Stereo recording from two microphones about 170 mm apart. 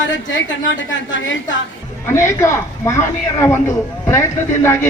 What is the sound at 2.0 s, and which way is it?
Speech, 15° left (ahead or behind).